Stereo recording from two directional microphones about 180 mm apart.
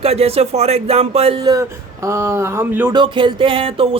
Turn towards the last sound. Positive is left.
turn(degrees=-30)  # may be behind; listen again after turning